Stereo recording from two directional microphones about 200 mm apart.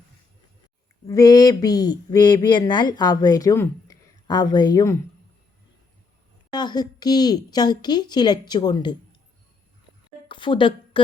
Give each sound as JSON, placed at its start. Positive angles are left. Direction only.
{"t": 1.0, "sound": "speech", "side_deg": 20}
{"t": 6.5, "sound": "speech", "side_deg": 20}
{"t": 10.2, "sound": "a sound", "side_deg": 25}